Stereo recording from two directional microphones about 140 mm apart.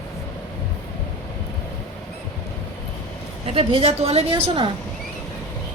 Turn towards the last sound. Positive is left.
turn(degrees=-35)  # may be behind; listen again after turning